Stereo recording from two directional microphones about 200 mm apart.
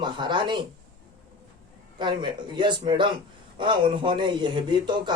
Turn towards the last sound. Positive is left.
turn(degrees=-20)  # may be behind; listen again after turning